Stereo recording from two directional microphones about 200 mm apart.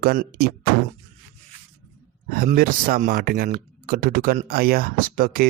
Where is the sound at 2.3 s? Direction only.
45° right (ahead or behind).